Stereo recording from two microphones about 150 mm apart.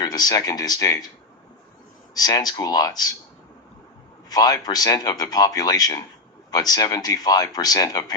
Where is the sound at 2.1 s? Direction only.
25° left (ahead or behind).